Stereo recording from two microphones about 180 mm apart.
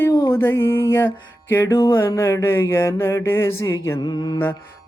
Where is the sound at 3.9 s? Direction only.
25° left (ahead or behind).